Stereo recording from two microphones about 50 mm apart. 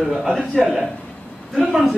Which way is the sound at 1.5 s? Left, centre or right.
Centre.